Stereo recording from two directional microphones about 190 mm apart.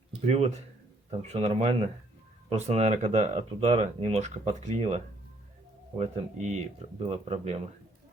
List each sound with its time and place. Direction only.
0.3 s speech: 35° right (ahead or behind)
6.0 s speech: 35° right (ahead or behind)